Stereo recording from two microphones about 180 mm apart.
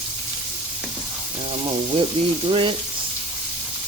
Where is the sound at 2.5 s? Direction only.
30° right (ahead or behind).